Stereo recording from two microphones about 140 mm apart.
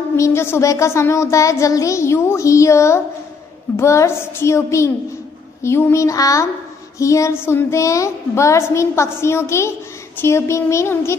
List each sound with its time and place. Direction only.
0.1 s child singing: 20° left (ahead or behind)